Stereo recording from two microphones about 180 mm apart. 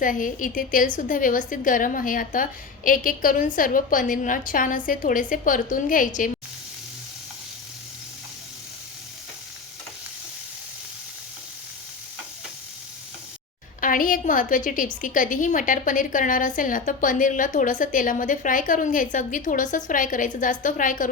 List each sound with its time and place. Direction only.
0.0 s a woman's voice: 50° left (ahead or behind)
13.8 s a woman's voice: 50° left (ahead or behind)